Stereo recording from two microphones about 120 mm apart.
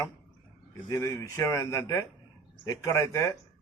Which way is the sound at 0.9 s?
30° left (ahead or behind).